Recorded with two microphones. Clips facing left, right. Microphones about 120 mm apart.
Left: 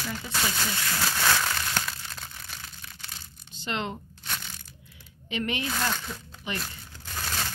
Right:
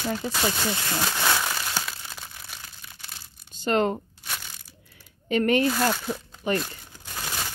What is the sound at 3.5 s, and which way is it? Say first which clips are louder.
Speech: right 9 dB; 45° right (ahead or behind).